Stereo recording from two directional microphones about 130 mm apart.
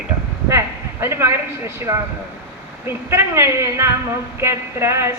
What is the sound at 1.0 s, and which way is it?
Speech, 20° right (ahead or behind).